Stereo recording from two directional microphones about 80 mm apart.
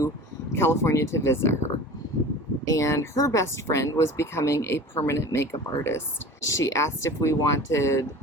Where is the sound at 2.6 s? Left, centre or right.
Left.